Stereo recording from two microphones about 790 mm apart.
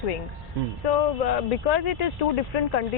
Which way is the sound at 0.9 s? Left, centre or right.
Left.